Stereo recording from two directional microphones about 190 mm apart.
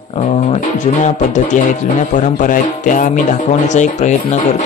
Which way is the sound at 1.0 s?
40° left (ahead or behind).